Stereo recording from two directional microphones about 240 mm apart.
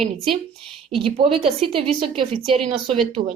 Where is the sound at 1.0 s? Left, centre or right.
Right.